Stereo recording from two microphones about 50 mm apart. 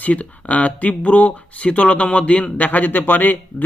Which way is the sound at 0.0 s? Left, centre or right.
Left.